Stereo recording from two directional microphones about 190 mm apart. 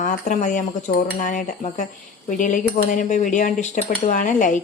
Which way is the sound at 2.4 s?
45° left (ahead or behind).